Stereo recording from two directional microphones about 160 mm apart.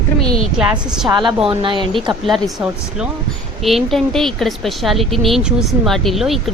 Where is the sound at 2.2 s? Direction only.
Centre (ahead or behind).